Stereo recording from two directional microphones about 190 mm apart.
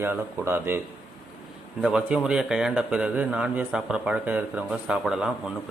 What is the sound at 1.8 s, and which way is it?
A man's voice, 5° right (ahead or behind).